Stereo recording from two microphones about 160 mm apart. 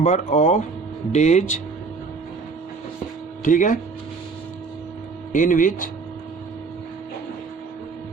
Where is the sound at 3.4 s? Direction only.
55° left (ahead or behind).